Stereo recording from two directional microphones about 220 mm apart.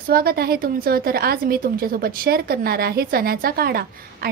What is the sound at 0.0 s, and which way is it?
A woman's voice, 45° right (ahead or behind).